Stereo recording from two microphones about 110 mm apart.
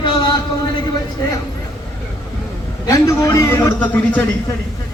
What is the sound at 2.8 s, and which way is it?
Speech, 30° left (ahead or behind).